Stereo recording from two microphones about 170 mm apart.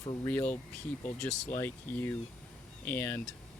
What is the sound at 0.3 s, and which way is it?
Speech, 10° left (ahead or behind).